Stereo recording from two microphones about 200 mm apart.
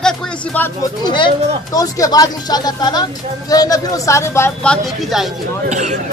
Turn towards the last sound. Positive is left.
turn(degrees=-35)  # may be behind; listen again after turning